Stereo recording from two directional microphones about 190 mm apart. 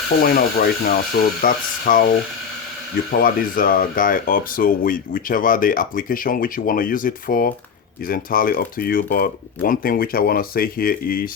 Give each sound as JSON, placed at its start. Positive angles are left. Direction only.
{"t": 0.2, "sound": "speech", "side_deg": 50}
{"t": 3.1, "sound": "speech", "side_deg": 50}